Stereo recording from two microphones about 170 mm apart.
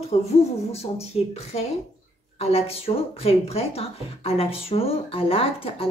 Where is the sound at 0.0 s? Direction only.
40° left (ahead or behind).